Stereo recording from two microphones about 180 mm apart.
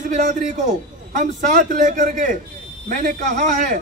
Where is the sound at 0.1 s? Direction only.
45° right (ahead or behind).